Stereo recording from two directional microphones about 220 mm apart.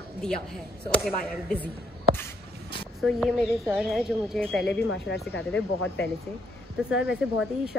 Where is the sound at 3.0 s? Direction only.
Centre (ahead or behind).